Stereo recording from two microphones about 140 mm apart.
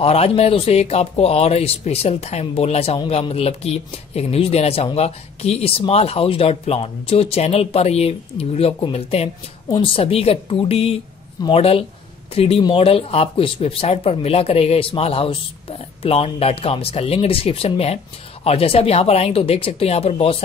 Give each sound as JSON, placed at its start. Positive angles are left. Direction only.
{"t": 0.0, "sound": "speech", "side_deg": 45}